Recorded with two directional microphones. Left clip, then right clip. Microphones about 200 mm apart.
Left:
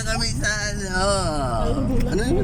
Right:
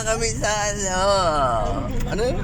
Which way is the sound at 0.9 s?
5° left (ahead or behind).